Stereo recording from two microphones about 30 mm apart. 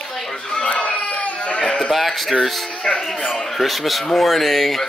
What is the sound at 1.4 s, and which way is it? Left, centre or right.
Speech, left.